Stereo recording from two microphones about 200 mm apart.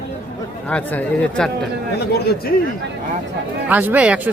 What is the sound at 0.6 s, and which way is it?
Speech, 5° left (ahead or behind).